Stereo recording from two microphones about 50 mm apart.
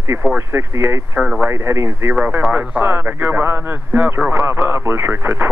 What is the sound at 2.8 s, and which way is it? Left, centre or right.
Speech, right.